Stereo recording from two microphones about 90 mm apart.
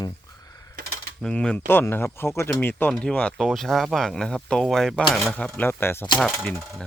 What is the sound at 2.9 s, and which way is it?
Speech, 10° left (ahead or behind).